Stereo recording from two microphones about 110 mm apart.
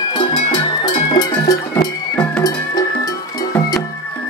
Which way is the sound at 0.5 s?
45° left (ahead or behind).